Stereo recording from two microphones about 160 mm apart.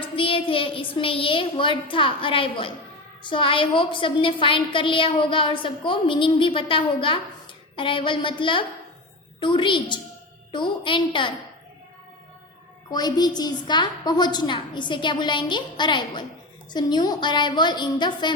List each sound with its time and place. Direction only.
0.2 s a woman's voice: 35° left (ahead or behind)
12.9 s a woman's voice: 25° left (ahead or behind)